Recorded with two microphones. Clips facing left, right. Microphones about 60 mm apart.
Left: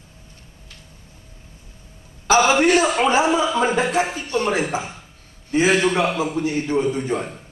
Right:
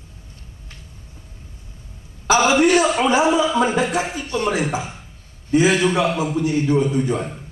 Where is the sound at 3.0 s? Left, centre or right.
Left.